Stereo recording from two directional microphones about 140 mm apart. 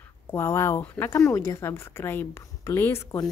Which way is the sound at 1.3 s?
20° left (ahead or behind).